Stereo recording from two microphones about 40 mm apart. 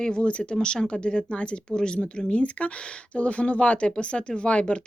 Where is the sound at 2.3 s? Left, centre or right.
Left.